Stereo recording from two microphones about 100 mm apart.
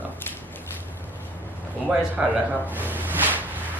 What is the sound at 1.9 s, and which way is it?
Speech, 10° right (ahead or behind).